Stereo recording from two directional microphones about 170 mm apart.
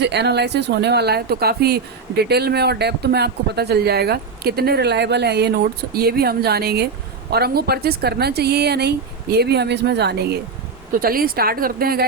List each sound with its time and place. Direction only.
0.0 s speech: 85° right
11.0 s a woman's voice: 60° right (ahead or behind)